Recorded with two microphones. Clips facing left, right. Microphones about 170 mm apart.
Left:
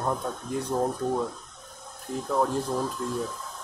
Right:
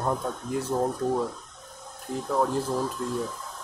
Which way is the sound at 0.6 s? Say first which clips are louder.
Even; 5° right (ahead or behind).